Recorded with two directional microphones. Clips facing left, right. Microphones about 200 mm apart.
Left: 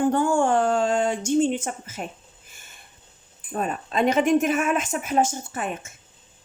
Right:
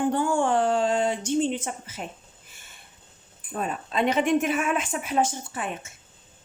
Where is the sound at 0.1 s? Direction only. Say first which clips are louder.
Left 3 dB; 45° left (ahead or behind).